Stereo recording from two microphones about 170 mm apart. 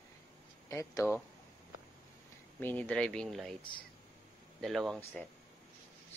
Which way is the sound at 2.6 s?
10° left (ahead or behind).